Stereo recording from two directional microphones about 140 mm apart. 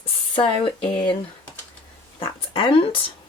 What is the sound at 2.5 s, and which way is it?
Speech, 40° left (ahead or behind).